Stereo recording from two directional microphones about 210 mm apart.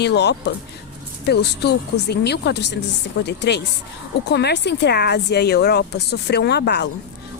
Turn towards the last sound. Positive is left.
turn(degrees=50)  # may be behind; listen again after turning